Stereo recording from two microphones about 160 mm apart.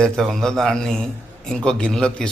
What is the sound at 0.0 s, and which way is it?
Speech, centre (ahead or behind).